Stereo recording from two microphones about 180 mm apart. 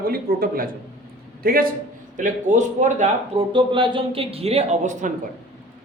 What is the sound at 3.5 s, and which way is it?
Speech, 25° right (ahead or behind).